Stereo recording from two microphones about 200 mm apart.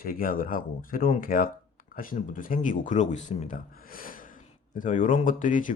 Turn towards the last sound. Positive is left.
turn(degrees=40)  # may be behind; listen again after turning